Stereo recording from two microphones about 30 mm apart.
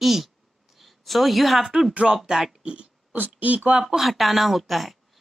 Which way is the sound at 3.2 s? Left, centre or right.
Right.